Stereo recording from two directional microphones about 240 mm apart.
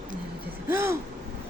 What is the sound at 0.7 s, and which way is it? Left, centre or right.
Speech, centre.